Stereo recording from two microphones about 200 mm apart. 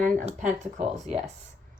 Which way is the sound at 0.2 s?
35° right (ahead or behind).